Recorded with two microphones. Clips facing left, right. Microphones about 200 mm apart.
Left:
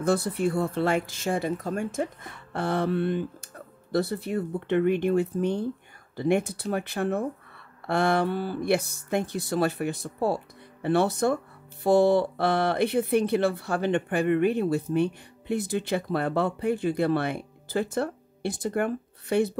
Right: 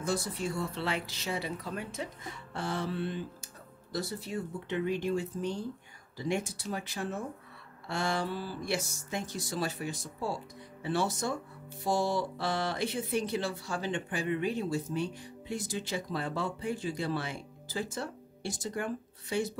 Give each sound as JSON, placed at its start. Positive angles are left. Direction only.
{"t": 0.0, "sound": "speech", "side_deg": 60}